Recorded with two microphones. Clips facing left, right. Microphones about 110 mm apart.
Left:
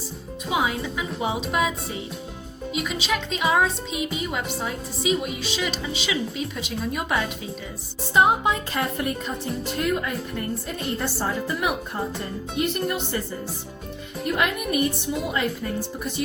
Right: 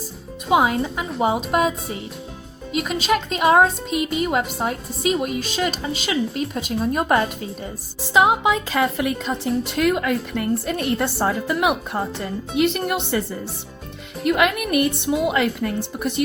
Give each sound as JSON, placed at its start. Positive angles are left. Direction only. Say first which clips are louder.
{"t": 0.5, "sound": "speech", "louder": "right 7 dB", "side_deg": -50}
{"t": 2.8, "sound": "speech", "louder": "right 7 dB", "side_deg": -45}
{"t": 8.1, "sound": "a woman's voice", "louder": "right 3 dB", "side_deg": -90}
{"t": 14.3, "sound": "a woman's voice", "louder": "right 5 dB", "side_deg": -80}